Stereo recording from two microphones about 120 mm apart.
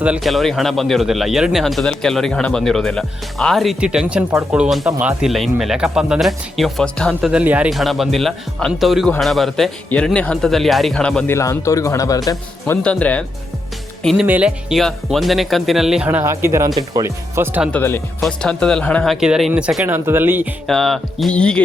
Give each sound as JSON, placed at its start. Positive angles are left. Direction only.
{"t": 0.0, "sound": "speech", "side_deg": -5}
{"t": 7.2, "sound": "speech", "side_deg": -10}
{"t": 7.7, "sound": "speech", "side_deg": 0}
{"t": 11.3, "sound": "speech", "side_deg": 25}
{"t": 12.8, "sound": "speech", "side_deg": 10}
{"t": 14.3, "sound": "speech", "side_deg": -15}
{"t": 14.7, "sound": "speech", "side_deg": 0}
{"t": 16.0, "sound": "speech", "side_deg": -20}
{"t": 17.7, "sound": "speech", "side_deg": 15}
{"t": 18.2, "sound": "speech", "side_deg": 5}
{"t": 19.0, "sound": "speech", "side_deg": -5}
{"t": 20.7, "sound": "speech", "side_deg": 0}